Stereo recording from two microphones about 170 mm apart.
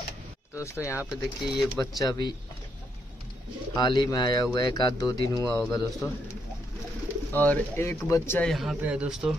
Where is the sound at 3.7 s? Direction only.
25° left (ahead or behind).